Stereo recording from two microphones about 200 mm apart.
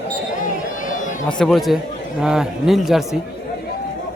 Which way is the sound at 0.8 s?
40° left (ahead or behind).